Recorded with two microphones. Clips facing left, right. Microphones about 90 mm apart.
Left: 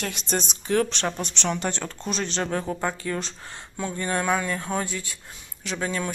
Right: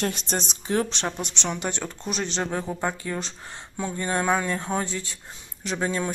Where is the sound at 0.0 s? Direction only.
30° right (ahead or behind).